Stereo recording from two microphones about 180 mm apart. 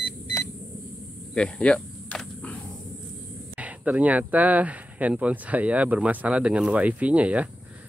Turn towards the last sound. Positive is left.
turn(degrees=-5)  # may be behind; listen again after turning